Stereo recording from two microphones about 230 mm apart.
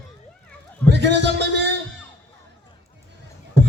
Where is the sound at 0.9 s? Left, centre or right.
Right.